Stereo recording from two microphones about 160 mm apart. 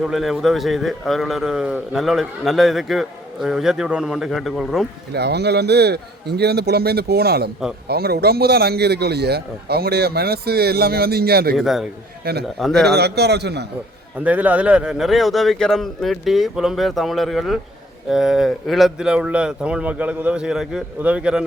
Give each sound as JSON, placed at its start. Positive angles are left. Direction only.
{"t": 0.0, "sound": "a man's voice", "side_deg": 0}
{"t": 5.1, "sound": "a man's voice", "side_deg": -90}
{"t": 11.5, "sound": "a man's voice", "side_deg": 0}
{"t": 12.2, "sound": "a man's voice", "side_deg": -85}
{"t": 12.5, "sound": "a man's voice", "side_deg": 0}
{"t": 12.9, "sound": "a man's voice", "side_deg": -90}
{"t": 14.3, "sound": "a man's voice", "side_deg": -10}